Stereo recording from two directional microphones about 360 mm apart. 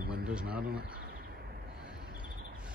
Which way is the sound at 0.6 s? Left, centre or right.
Right.